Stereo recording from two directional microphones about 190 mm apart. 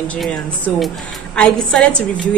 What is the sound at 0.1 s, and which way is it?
Speech, 5° left (ahead or behind).